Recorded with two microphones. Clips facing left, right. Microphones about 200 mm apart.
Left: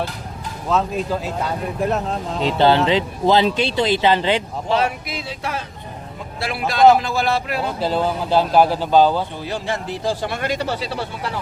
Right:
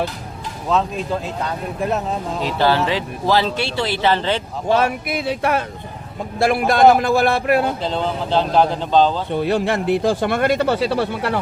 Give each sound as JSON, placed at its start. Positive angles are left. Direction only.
{"t": 0.7, "sound": "speech", "side_deg": 0}
{"t": 2.4, "sound": "speech", "side_deg": 25}
{"t": 4.7, "sound": "a man's voice", "side_deg": -55}
{"t": 6.4, "sound": "a man's voice", "side_deg": -50}
{"t": 7.8, "sound": "speech", "side_deg": 5}
{"t": 9.3, "sound": "a man's voice", "side_deg": -60}